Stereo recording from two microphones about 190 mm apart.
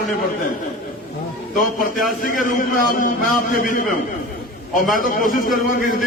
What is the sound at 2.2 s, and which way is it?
A man's voice, 45° left (ahead or behind).